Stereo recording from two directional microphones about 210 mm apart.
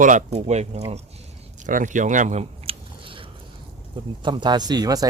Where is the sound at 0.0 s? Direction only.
35° right (ahead or behind).